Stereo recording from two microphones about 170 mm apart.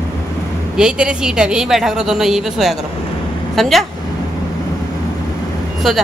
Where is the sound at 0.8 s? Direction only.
5° right (ahead or behind).